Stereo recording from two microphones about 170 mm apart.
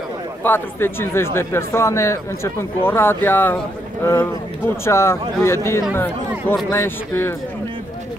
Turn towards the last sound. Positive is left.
turn(degrees=15)  # may be behind; listen again after turning